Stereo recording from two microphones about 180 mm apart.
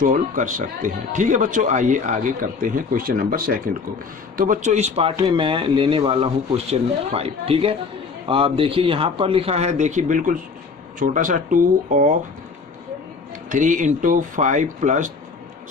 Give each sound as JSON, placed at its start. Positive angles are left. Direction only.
{"t": 0.0, "sound": "a man's voice", "side_deg": -45}
{"t": 13.5, "sound": "a man's voice", "side_deg": -45}